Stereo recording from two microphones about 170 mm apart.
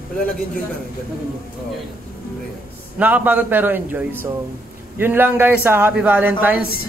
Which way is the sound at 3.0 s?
10° right (ahead or behind).